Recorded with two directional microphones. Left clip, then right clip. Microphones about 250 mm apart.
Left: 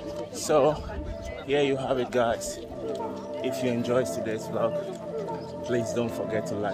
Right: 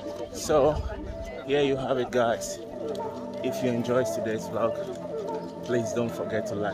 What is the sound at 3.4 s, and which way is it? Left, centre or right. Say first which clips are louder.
Speech: even; centre.